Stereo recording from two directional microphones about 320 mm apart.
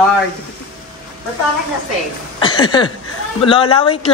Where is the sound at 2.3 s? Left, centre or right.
Centre.